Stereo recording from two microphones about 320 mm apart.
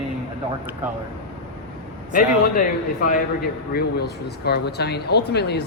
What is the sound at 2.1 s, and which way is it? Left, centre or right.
Speech, left.